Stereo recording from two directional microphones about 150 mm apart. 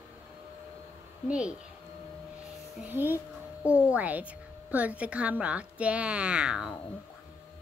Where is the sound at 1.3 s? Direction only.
5° right (ahead or behind).